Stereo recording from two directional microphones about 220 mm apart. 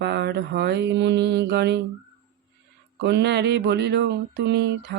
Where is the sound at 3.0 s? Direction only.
50° right (ahead or behind).